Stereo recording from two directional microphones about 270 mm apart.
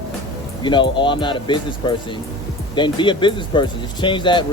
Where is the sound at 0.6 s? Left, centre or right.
Centre.